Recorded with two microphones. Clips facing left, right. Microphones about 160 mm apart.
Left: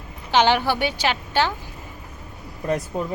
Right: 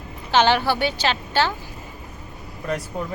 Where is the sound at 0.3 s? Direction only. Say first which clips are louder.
Even; 15° left (ahead or behind).